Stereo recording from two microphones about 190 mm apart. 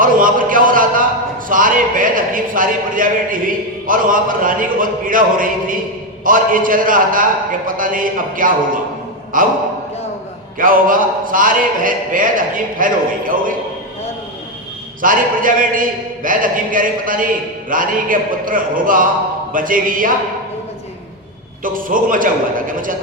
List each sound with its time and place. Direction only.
0.0 s a sound: 45° right (ahead or behind)
6.2 s speech: 45° right (ahead or behind)
10.6 s speech: 45° right (ahead or behind)
15.0 s speech: 45° right (ahead or behind)
21.6 s speech: 45° right (ahead or behind)